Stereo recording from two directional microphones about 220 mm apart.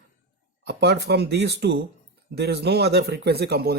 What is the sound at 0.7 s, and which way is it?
A man's voice, 50° right (ahead or behind).